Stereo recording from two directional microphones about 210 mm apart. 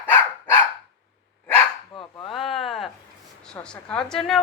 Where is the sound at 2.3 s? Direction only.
Centre (ahead or behind).